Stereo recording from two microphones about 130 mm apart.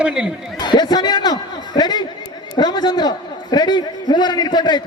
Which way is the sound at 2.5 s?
35° left (ahead or behind).